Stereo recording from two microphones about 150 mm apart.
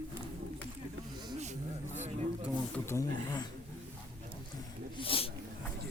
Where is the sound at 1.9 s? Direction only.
50° right (ahead or behind).